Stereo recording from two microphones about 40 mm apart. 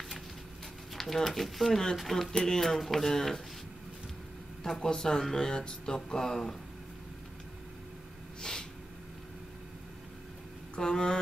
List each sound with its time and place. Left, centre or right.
0.9 s speech: centre
4.7 s speech: centre
8.4 s snort: centre
10.8 s speech: centre